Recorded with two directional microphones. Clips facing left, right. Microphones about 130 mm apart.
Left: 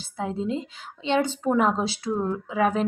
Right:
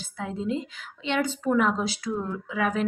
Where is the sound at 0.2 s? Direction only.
35° left (ahead or behind).